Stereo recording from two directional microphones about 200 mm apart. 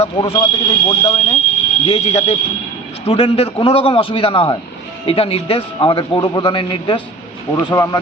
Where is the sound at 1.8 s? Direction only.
30° left (ahead or behind).